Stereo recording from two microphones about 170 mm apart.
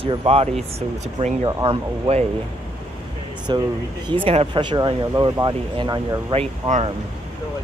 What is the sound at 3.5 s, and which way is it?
Speech, 25° right (ahead or behind).